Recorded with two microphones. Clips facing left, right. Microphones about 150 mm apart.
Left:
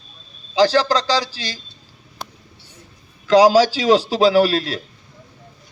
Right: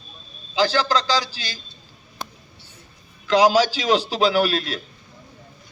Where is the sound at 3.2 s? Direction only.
35° left (ahead or behind).